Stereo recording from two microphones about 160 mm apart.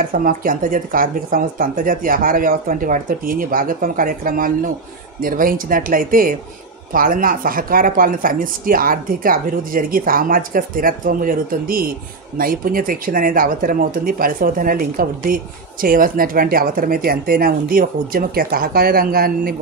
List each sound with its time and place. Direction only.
0.1 s speech: 60° right (ahead or behind)